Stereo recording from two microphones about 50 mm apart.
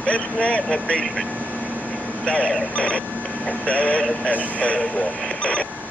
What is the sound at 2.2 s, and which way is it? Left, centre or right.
Speech, centre.